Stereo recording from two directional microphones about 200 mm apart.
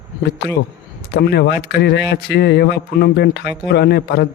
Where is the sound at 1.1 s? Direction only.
55° left (ahead or behind).